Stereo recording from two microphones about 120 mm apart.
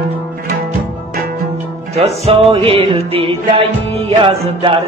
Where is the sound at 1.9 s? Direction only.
60° right (ahead or behind).